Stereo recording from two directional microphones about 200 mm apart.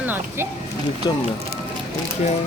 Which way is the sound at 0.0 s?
10° right (ahead or behind).